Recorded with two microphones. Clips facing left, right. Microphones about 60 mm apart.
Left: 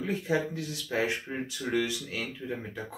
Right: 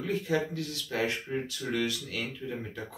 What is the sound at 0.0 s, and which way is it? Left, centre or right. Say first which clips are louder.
Speech: even; centre.